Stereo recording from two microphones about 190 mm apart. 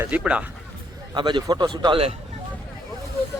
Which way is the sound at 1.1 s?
25° right (ahead or behind).